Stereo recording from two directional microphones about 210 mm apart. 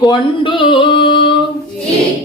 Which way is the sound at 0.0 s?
20° left (ahead or behind).